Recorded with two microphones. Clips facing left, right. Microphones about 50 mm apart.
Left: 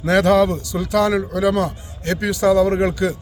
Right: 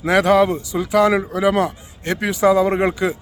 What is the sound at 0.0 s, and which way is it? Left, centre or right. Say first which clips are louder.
A man's voice: even; centre.